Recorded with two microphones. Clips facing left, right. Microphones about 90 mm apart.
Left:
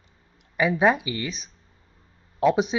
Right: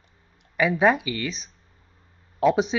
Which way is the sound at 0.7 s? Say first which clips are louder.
Right 1 dB; 5° left (ahead or behind).